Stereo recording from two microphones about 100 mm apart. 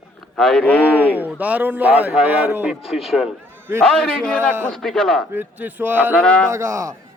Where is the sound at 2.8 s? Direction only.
5° right (ahead or behind).